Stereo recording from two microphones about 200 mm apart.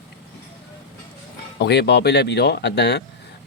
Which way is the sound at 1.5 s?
55° left (ahead or behind).